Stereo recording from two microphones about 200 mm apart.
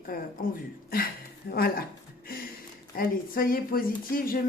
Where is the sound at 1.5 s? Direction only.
50° left (ahead or behind).